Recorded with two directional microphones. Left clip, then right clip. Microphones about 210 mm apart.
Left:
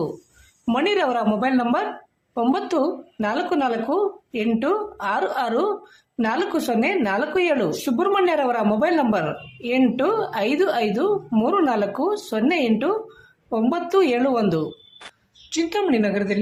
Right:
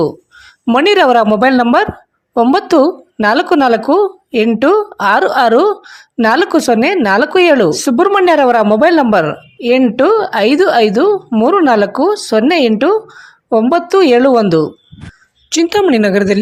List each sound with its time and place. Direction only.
0.6 s speech: 40° right (ahead or behind)